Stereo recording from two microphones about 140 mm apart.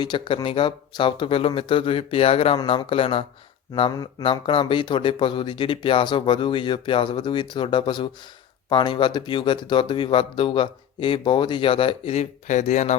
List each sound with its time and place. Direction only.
0.0 s speech: 30° left (ahead or behind); by 13.0 s 55° left (ahead or behind)